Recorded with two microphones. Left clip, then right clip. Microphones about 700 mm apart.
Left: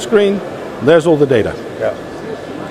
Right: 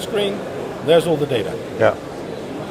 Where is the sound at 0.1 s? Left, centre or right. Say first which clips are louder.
Left 10 dB; left.